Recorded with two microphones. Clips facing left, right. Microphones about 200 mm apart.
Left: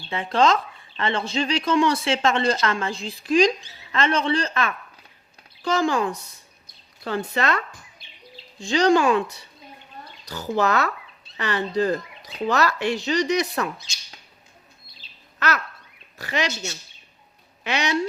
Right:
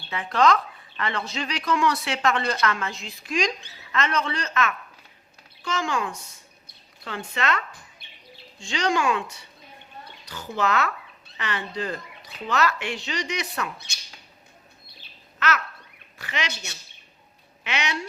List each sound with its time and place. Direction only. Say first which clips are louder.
0.1 s speech: left 1 dB; 25° left (ahead or behind)
13.7 s speech: even; 60° right (ahead or behind)
15.4 s babbling: left 1 dB; 35° left (ahead or behind)
16.1 s speech: left 6 dB; 40° left (ahead or behind)
17.6 s speech: left 4 dB; 40° left (ahead or behind)